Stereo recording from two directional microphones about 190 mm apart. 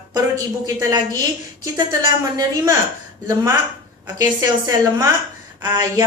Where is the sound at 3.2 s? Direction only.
15° right (ahead or behind).